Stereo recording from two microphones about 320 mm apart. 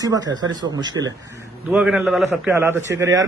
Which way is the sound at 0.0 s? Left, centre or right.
Centre.